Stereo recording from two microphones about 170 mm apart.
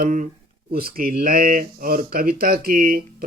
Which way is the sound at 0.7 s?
60° right (ahead or behind).